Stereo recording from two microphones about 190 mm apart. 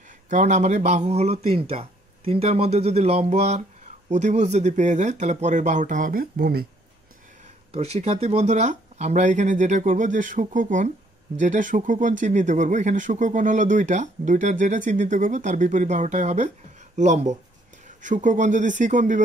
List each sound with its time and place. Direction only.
0.3 s speech: 40° right (ahead or behind)
7.7 s speech: 35° right (ahead or behind)